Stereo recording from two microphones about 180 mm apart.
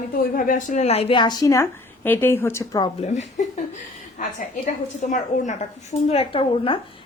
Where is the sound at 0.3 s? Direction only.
45° left (ahead or behind); by 2.9 s 20° left (ahead or behind).